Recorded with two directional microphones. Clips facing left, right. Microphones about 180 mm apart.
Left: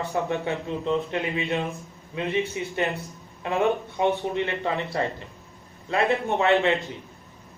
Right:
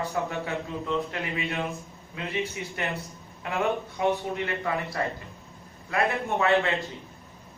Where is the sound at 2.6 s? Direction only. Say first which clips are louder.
Left 5 dB; 25° left (ahead or behind).